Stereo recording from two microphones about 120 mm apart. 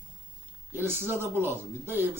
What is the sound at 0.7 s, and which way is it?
Speech, 20° right (ahead or behind).